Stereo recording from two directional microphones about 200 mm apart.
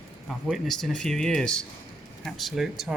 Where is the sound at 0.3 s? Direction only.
Centre (ahead or behind).